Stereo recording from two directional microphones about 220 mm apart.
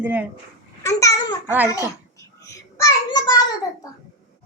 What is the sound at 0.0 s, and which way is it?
Speech, 5° right (ahead or behind).